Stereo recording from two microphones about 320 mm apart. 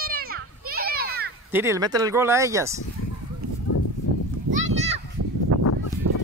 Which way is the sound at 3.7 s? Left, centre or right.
Left.